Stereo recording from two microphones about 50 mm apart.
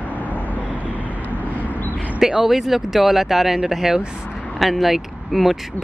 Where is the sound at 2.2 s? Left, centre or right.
Centre.